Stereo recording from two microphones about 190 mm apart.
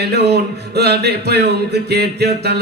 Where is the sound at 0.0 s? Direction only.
60° right (ahead or behind).